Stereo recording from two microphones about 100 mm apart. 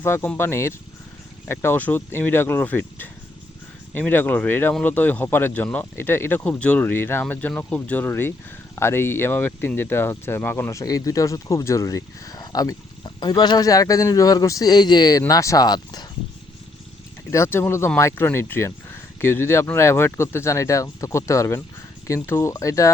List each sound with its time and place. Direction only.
0.0 s speech: 25° left (ahead or behind); by 16.0 s 45° left (ahead or behind)
17.3 s speech: 25° left (ahead or behind)